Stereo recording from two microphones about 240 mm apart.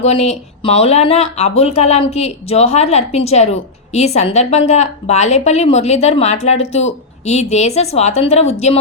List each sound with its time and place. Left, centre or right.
0.0 s speech: left